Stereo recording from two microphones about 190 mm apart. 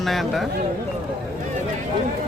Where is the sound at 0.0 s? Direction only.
Centre (ahead or behind).